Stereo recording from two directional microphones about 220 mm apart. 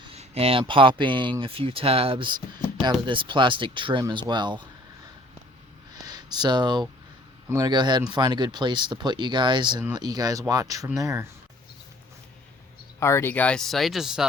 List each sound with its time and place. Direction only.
0.1 s a sound: 25° right (ahead or behind)
0.6 s speech: 25° right (ahead or behind)
6.1 s speech: 20° right (ahead or behind)
13.0 s speech: 10° left (ahead or behind)